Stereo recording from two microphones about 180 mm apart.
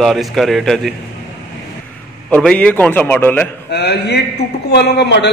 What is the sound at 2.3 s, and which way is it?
A man's voice, 5° left (ahead or behind).